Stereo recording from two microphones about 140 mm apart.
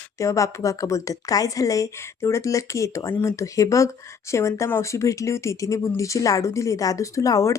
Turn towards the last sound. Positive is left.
turn(degrees=25)  # may be behind; listen again after turning